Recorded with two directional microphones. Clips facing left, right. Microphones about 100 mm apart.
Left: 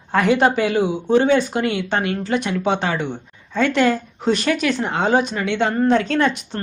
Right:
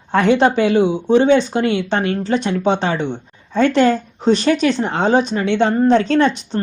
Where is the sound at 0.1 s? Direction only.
30° right (ahead or behind).